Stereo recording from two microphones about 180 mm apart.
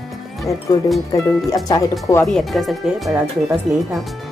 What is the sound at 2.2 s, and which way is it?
Speech, centre (ahead or behind).